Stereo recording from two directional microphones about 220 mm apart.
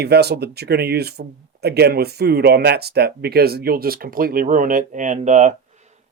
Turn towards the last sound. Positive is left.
turn(degrees=-35)  # may be behind; listen again after turning